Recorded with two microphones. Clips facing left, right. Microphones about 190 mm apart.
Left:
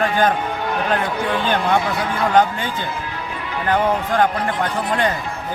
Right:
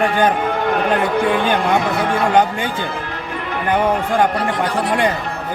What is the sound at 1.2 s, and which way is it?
Speech, 50° right (ahead or behind).